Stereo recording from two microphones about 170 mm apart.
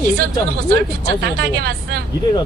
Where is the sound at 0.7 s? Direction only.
75° right (ahead or behind).